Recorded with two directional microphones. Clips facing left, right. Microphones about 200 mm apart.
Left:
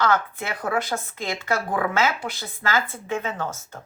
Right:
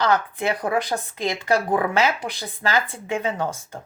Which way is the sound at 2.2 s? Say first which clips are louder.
Right 2 dB; 15° right (ahead or behind).